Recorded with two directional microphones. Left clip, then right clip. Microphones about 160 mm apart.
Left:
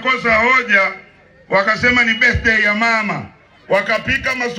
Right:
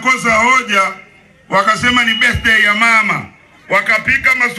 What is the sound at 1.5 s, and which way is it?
A man's voice, centre (ahead or behind).